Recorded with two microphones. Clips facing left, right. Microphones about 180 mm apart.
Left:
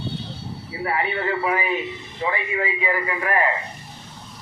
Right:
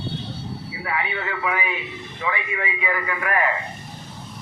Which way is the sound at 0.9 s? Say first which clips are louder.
Left 4 dB; 40° left (ahead or behind).